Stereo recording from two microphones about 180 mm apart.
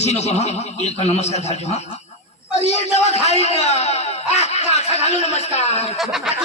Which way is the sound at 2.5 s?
35° left (ahead or behind).